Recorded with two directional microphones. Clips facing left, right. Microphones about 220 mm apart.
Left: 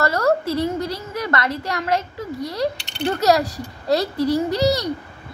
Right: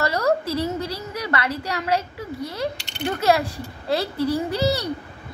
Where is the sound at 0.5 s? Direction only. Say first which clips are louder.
Left 3 dB; 35° right (ahead or behind).